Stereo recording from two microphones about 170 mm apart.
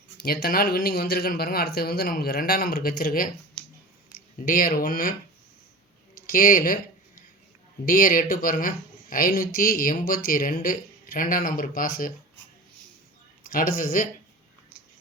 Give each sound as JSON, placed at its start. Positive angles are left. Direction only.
{"t": 0.2, "sound": "speech", "side_deg": 65}
{"t": 4.4, "sound": "speech", "side_deg": 55}
{"t": 6.1, "sound": "speech", "side_deg": 60}
{"t": 7.9, "sound": "speech", "side_deg": 55}
{"t": 13.5, "sound": "speech", "side_deg": 55}